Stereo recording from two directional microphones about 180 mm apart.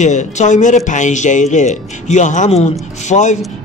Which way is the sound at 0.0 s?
40° left (ahead or behind).